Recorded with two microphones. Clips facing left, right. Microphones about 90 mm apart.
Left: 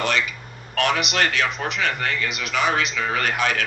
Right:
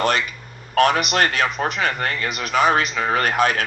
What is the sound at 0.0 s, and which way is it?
Speech, 40° right (ahead or behind).